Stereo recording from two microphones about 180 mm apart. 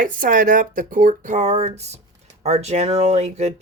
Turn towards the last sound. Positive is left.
turn(degrees=-40)  # may be behind; listen again after turning